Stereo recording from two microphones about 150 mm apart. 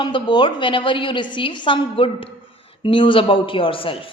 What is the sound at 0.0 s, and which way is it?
A woman's voice, 30° left (ahead or behind).